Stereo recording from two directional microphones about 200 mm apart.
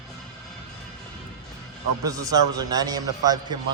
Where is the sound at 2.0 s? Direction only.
15° right (ahead or behind).